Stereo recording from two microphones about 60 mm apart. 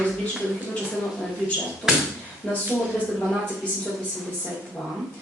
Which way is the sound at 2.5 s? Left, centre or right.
Left.